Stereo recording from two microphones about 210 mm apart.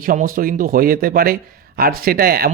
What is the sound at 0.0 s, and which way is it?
Speech, 40° right (ahead or behind).